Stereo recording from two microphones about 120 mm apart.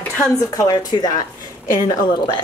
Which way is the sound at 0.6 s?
30° left (ahead or behind).